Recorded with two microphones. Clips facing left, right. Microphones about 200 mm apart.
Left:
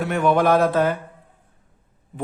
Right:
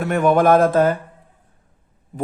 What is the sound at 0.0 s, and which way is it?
Speech, 50° right (ahead or behind).